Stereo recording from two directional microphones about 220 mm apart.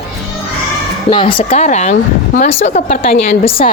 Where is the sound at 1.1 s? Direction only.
25° left (ahead or behind).